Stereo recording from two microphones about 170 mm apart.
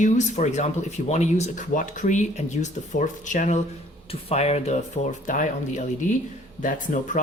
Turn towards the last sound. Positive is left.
turn(degrees=45)  # may be behind; listen again after turning